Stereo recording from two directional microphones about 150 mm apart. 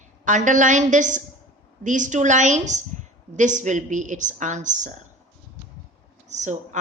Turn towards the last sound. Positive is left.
turn(degrees=-50)  # may be behind; listen again after turning